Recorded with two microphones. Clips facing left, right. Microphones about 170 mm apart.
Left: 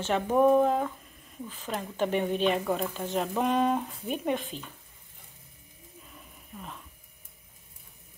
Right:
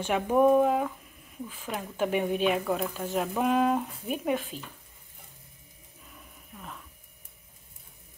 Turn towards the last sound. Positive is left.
turn(degrees=5)  # may be behind; listen again after turning